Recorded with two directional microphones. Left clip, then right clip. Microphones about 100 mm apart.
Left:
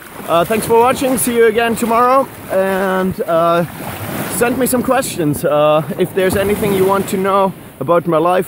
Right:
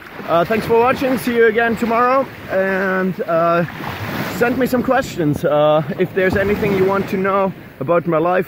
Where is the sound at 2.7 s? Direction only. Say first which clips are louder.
Left 2 dB; 30° left (ahead or behind).